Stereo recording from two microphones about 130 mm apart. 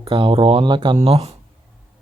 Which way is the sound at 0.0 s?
45° right (ahead or behind).